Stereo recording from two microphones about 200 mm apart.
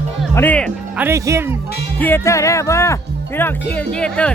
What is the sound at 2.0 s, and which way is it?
Speech, 10° left (ahead or behind).